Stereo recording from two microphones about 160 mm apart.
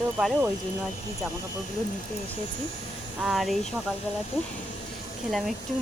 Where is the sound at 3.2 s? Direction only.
Centre (ahead or behind).